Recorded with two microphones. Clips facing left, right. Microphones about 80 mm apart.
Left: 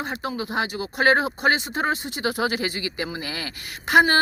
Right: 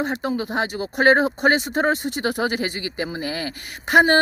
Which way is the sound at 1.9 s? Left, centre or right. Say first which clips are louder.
Right 3 dB; right.